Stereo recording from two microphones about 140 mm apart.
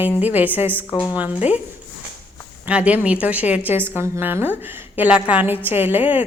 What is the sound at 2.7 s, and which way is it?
A woman's voice, 10° right (ahead or behind).